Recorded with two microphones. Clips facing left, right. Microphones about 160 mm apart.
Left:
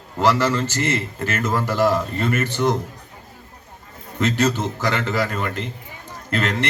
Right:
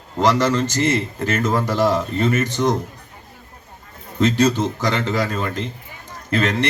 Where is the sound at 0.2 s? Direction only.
15° right (ahead or behind).